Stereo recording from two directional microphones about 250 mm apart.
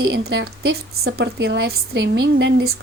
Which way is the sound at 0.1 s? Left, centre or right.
Right.